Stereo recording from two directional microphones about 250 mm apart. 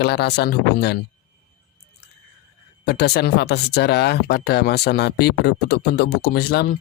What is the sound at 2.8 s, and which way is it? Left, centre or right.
Speech, left.